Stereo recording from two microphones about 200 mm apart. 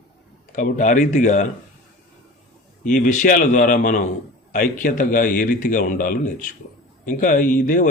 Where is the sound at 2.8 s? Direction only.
40° left (ahead or behind).